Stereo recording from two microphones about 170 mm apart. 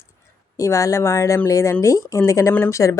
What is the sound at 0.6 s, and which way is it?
Speech, 20° left (ahead or behind).